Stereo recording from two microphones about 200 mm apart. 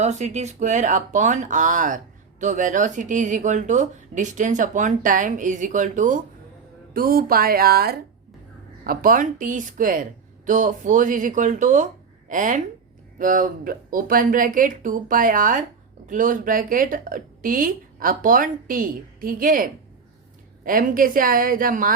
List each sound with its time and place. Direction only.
0.0 s a woman's voice: 35° right (ahead or behind)